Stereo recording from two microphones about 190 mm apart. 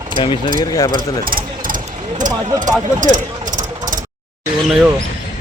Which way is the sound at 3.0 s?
40° right (ahead or behind).